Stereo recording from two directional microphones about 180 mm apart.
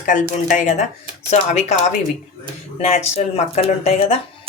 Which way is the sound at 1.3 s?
40° left (ahead or behind).